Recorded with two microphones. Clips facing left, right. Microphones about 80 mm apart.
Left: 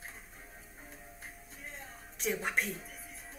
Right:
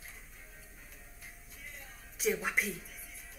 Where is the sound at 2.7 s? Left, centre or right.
Left.